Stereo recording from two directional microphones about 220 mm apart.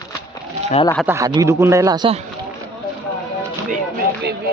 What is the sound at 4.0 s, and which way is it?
Speech, 45° right (ahead or behind).